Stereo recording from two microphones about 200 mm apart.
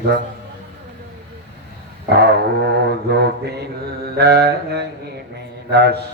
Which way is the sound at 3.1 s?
55° right (ahead or behind).